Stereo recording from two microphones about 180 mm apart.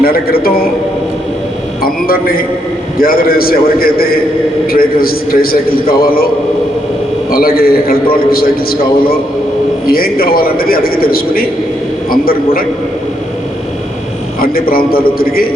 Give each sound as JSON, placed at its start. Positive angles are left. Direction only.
{"t": 0.0, "sound": "a man's voice", "side_deg": 55}
{"t": 1.8, "sound": "a man's voice", "side_deg": 55}
{"t": 14.4, "sound": "a man's voice", "side_deg": 55}